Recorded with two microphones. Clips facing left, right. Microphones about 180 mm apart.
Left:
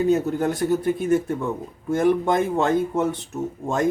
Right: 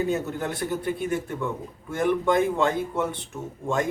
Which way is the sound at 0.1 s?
40° left (ahead or behind).